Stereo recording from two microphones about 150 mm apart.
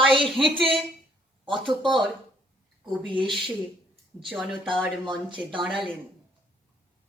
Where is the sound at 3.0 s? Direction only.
35° right (ahead or behind).